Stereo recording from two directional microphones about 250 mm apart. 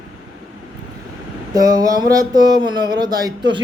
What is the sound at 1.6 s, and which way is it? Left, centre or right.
A man's voice, centre.